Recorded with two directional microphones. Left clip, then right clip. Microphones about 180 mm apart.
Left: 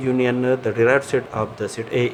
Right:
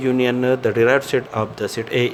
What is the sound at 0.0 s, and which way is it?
Speech, 35° right (ahead or behind).